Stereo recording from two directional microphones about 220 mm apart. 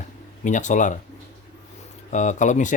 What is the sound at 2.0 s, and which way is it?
Speech, 35° left (ahead or behind).